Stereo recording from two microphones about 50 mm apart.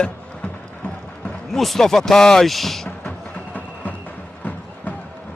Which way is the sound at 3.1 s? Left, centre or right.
Left.